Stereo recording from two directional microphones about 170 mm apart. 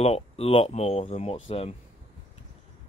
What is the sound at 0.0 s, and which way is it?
Speech, 35° left (ahead or behind).